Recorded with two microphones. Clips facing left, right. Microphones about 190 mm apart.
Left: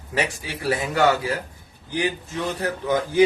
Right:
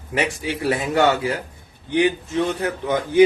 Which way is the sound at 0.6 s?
25° right (ahead or behind).